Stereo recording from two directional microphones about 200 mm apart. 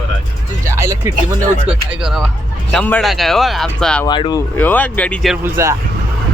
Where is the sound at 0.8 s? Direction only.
15° right (ahead or behind).